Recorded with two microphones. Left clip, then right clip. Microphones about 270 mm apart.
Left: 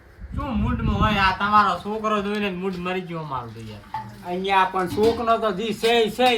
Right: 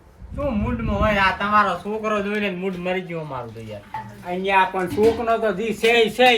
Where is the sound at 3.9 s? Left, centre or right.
Left.